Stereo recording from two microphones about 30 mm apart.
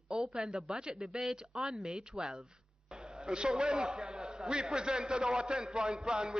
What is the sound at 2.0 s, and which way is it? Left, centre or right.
A man's voice, right.